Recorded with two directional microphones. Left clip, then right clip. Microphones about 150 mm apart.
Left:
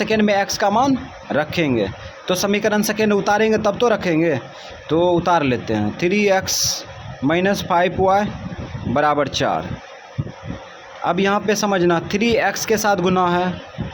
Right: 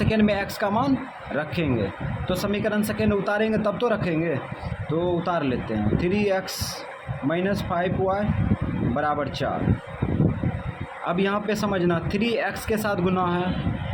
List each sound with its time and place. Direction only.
0.0 s speech: 35° left (ahead or behind)
11.0 s speech: 35° left (ahead or behind)